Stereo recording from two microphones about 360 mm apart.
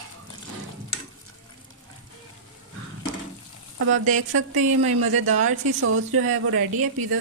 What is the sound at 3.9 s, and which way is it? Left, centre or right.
A woman's voice, right.